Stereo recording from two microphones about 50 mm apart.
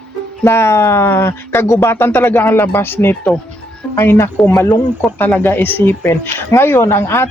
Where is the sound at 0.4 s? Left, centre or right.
Left.